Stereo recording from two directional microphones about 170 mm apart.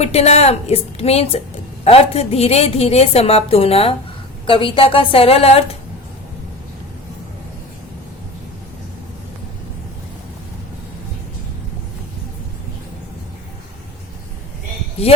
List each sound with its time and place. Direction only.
0.0 s a woman's voice: 40° left (ahead or behind)
15.0 s speech: 35° left (ahead or behind)